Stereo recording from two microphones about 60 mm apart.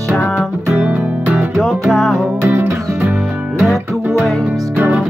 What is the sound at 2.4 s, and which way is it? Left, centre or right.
Music, right.